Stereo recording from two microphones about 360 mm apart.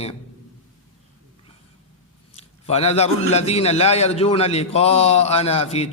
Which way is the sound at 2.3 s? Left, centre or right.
Centre.